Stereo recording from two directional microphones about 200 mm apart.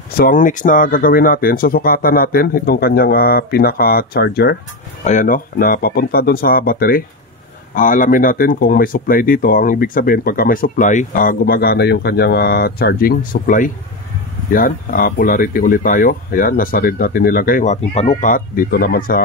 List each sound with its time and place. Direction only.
0.2 s speech: 40° left (ahead or behind)
5.0 s speech: 40° left (ahead or behind)